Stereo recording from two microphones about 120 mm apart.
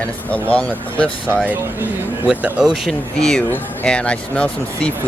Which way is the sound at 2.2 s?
5° right (ahead or behind).